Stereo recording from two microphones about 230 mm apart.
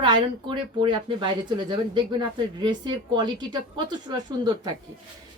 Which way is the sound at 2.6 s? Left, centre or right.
Centre.